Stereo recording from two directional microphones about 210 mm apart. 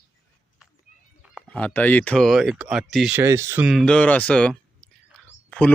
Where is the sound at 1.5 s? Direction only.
5° left (ahead or behind).